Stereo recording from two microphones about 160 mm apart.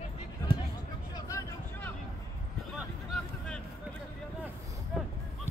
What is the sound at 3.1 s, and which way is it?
Vehicle, 5° left (ahead or behind).